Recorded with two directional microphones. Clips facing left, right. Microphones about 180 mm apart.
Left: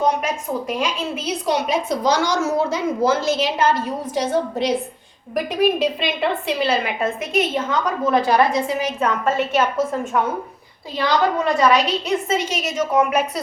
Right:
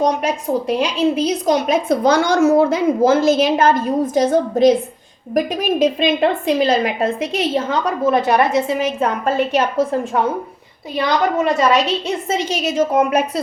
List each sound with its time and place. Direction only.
0.0 s a woman's voice: 35° right (ahead or behind)
5.8 s a woman's voice: 45° right (ahead or behind)